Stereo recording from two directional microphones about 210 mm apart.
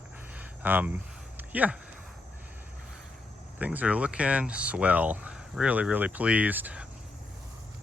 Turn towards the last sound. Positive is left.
turn(degrees=-10)  # may be behind; listen again after turning